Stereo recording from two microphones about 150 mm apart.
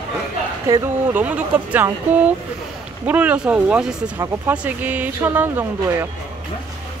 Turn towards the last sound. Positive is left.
turn(degrees=-15)  # may be behind; listen again after turning